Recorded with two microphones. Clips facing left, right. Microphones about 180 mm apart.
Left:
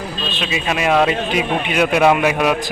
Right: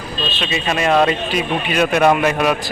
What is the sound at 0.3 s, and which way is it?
Speech, 5° left (ahead or behind).